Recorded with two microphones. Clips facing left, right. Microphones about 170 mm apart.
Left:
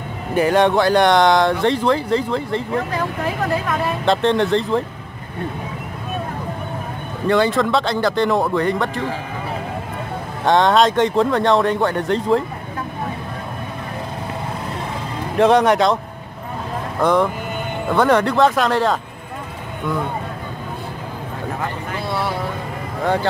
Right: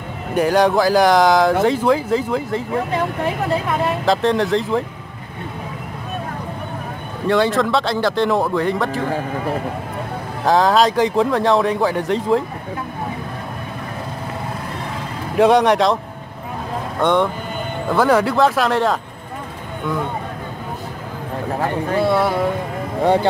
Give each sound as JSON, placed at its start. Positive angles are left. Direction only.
{"t": 0.3, "sound": "speech", "side_deg": 0}
{"t": 4.0, "sound": "speech", "side_deg": 0}
{"t": 7.2, "sound": "speech", "side_deg": 0}
{"t": 10.4, "sound": "speech", "side_deg": 0}
{"t": 15.3, "sound": "speech", "side_deg": 0}
{"t": 17.0, "sound": "speech", "side_deg": 0}
{"t": 22.0, "sound": "speech", "side_deg": -50}